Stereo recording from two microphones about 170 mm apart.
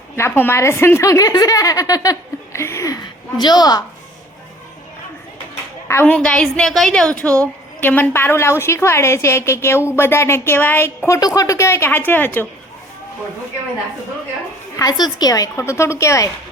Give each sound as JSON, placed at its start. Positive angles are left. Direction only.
{"t": 0.2, "sound": "a woman's voice", "side_deg": 15}
{"t": 5.9, "sound": "a woman's voice", "side_deg": 10}
{"t": 14.8, "sound": "a woman's voice", "side_deg": 25}